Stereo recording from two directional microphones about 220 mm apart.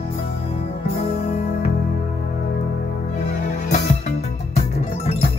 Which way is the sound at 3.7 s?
35° left (ahead or behind).